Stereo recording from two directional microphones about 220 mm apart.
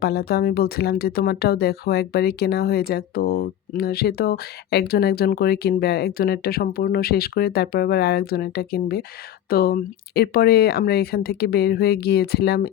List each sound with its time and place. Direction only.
0.0 s speech: 45° left (ahead or behind)